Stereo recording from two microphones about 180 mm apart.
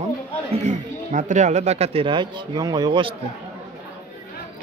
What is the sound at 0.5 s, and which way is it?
Speech, 40° right (ahead or behind).